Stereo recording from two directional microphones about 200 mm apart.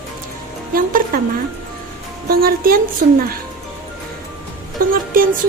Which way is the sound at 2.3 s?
45° right (ahead or behind).